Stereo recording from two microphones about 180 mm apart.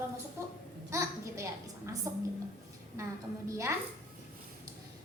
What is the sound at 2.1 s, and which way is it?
Speech, 15° right (ahead or behind).